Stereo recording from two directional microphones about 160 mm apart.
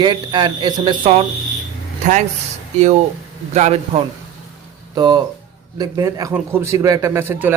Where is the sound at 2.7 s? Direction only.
45° right (ahead or behind).